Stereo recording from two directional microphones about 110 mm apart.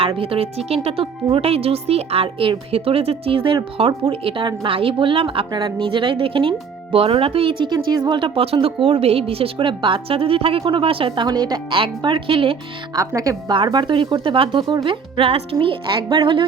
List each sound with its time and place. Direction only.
0.2 s speech: 60° right (ahead or behind)
7.7 s speech: 40° right (ahead or behind)
8.6 s speech: 60° right (ahead or behind)
12.9 s speech: 30° right (ahead or behind)
13.5 s speech: 45° right (ahead or behind)
16.0 s speech: 45° right (ahead or behind)